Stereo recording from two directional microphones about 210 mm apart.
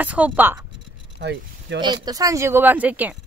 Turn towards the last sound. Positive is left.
turn(degrees=-5)  # may be behind; listen again after turning